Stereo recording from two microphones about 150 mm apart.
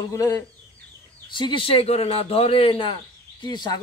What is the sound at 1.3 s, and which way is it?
A man's voice, 35° left (ahead or behind).